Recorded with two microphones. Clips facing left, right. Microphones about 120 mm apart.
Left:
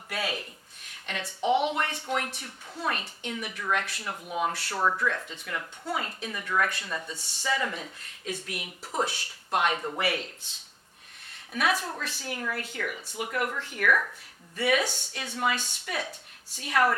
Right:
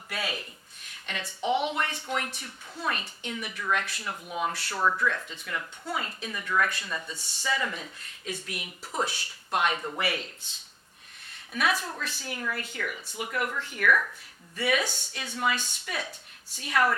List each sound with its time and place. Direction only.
0.1 s a woman's voice: 50° left (ahead or behind)
4.1 s a woman's voice: 35° left (ahead or behind); by 8.7 s 50° left (ahead or behind)
8.8 s a woman's voice: 40° left (ahead or behind)
11.5 s a woman's voice: 50° left (ahead or behind); by 15.1 s 70° left (ahead or behind)
15.3 s speech: 40° left (ahead or behind)
15.5 s a woman's voice: 55° left (ahead or behind)